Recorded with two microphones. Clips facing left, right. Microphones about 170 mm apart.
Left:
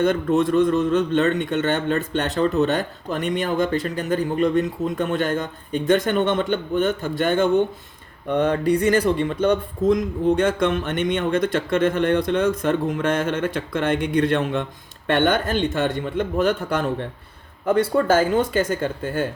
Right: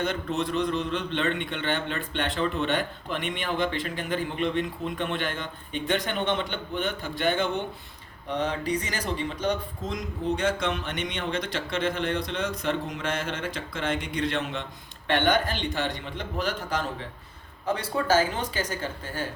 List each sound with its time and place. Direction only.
0.0 s speech: 50° left (ahead or behind)